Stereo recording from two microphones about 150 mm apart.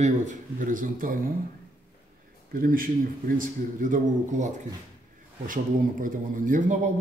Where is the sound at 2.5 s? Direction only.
70° right (ahead or behind).